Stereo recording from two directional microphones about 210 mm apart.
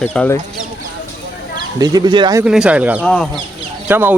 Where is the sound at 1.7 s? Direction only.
20° right (ahead or behind).